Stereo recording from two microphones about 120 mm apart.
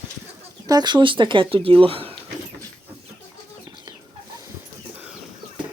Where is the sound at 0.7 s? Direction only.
35° right (ahead or behind).